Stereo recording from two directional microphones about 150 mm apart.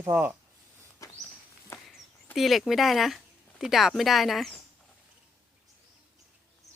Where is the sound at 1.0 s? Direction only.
20° left (ahead or behind).